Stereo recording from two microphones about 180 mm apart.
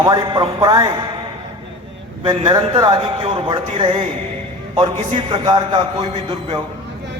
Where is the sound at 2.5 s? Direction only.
25° right (ahead or behind).